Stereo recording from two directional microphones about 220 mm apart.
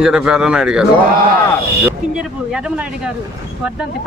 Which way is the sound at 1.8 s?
5° right (ahead or behind).